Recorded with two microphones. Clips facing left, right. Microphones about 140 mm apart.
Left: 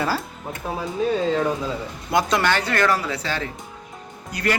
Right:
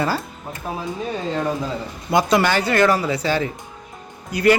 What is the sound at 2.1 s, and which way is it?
A man's voice, 5° right (ahead or behind).